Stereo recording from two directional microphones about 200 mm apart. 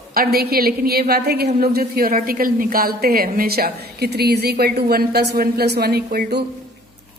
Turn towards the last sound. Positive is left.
turn(degrees=-55)  # may be behind; listen again after turning